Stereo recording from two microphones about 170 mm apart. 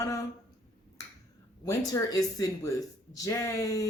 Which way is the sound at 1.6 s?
20° left (ahead or behind).